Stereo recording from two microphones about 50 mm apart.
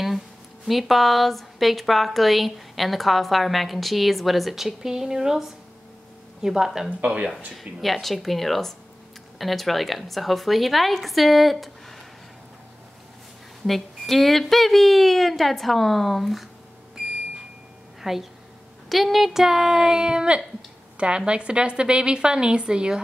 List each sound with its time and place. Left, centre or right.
0.7 s a woman's voice: centre
13.7 s a woman's voice: centre
18.1 s a woman's voice: centre